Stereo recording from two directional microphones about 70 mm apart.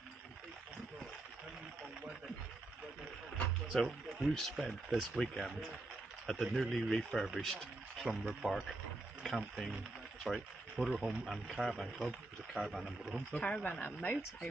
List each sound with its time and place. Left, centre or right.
3.6 s speech: centre
5.2 s speech: centre
8.0 s speech: centre
10.2 s speech: centre
13.3 s speech: centre